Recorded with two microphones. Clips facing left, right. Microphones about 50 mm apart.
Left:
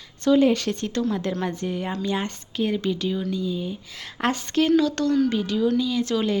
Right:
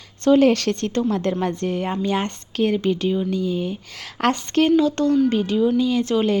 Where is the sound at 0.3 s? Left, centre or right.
Right.